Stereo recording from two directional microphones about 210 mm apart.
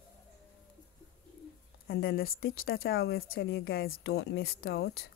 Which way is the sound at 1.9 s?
45° left (ahead or behind).